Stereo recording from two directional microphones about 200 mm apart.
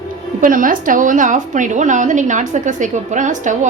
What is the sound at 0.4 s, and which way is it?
A woman's voice, 40° right (ahead or behind).